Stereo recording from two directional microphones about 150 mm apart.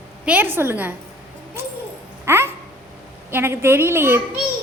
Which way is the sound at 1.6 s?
15° right (ahead or behind).